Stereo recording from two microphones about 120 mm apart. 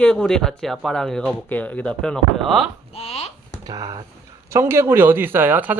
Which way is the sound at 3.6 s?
30° right (ahead or behind).